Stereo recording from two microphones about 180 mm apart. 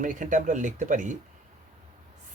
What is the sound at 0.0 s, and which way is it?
Speech, 45° right (ahead or behind).